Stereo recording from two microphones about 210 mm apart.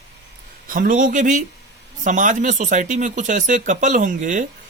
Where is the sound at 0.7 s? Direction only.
40° right (ahead or behind).